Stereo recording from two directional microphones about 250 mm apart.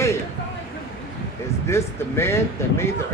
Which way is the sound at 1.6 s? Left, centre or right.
Centre.